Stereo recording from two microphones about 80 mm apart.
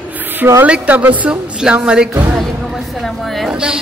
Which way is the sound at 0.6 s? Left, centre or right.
Centre.